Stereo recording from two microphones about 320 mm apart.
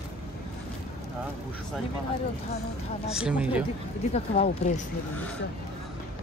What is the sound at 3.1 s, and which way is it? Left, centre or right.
Speech, centre.